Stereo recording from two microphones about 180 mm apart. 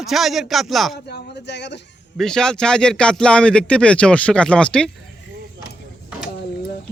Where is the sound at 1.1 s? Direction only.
70° left (ahead or behind).